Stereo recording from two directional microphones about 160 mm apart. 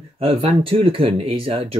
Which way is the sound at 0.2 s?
35° right (ahead or behind).